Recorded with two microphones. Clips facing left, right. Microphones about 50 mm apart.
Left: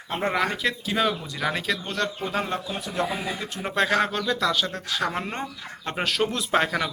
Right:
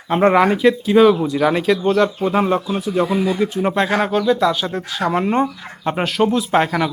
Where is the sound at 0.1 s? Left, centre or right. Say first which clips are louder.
Right 12 dB; right.